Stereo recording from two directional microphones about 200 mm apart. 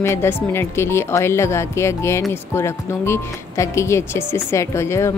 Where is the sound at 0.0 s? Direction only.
10° left (ahead or behind).